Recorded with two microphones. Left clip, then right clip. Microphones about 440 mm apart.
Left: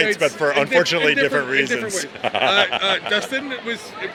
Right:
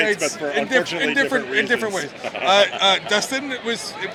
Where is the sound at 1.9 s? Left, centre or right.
Left.